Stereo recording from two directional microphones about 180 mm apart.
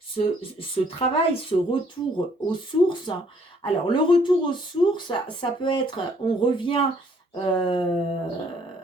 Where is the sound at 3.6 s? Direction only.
30° left (ahead or behind).